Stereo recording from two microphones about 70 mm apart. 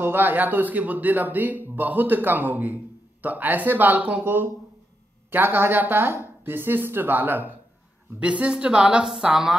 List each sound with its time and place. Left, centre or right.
0.0 s speech: right
8.2 s a woman's voice: centre